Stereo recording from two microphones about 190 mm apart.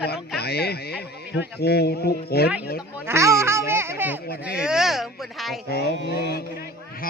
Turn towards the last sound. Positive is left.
turn(degrees=55)  # may be behind; listen again after turning